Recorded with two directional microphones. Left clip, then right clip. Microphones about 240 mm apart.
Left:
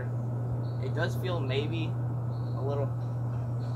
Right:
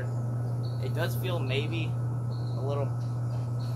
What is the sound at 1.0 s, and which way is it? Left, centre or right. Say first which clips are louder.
Speech: even; centre.